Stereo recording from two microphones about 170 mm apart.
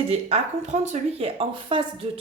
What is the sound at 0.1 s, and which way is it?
Speech, 40° right (ahead or behind).